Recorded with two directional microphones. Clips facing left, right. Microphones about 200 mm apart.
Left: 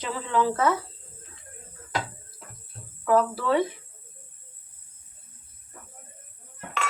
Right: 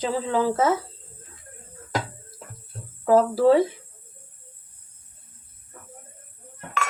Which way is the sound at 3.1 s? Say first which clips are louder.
Right 6 dB; 35° right (ahead or behind).